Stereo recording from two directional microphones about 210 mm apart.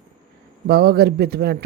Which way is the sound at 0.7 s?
50° right (ahead or behind).